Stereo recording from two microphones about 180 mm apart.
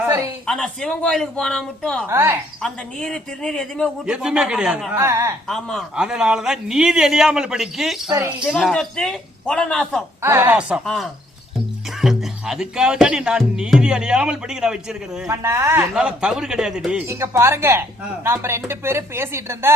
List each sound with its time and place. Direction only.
0.0 s a sound: 10° right (ahead or behind)
0.4 s speech: centre (ahead or behind)
2.0 s speech: 15° right (ahead or behind)
2.6 s speech: 5° left (ahead or behind); by 5.3 s 15° right (ahead or behind)
5.5 s speech: centre (ahead or behind)
8.1 s speech: 15° right (ahead or behind)
8.4 s speech: centre (ahead or behind)
10.2 s speech: 15° right (ahead or behind)
15.3 s speech: 15° right (ahead or behind)
16.0 s speech: 5° right (ahead or behind)